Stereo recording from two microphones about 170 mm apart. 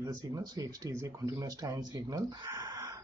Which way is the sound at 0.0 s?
20° right (ahead or behind).